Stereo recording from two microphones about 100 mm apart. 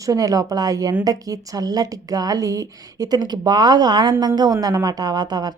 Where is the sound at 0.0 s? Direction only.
35° right (ahead or behind).